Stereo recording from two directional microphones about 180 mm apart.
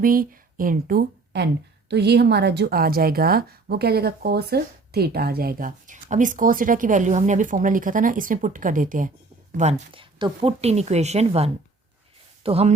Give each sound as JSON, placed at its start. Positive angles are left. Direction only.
{"t": 0.0, "sound": "a woman's voice", "side_deg": -50}